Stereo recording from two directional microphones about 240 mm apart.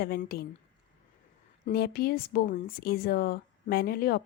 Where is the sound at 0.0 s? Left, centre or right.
Left.